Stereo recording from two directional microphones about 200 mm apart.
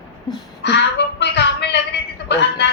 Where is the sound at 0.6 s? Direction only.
60° left (ahead or behind).